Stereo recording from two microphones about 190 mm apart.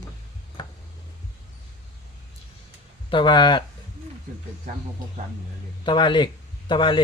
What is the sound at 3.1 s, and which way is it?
Speech, 25° left (ahead or behind).